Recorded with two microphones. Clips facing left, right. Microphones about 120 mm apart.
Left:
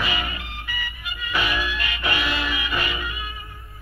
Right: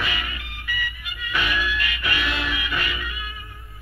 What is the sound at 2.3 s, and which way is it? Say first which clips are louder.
Music: left 1 dB; centre (ahead or behind).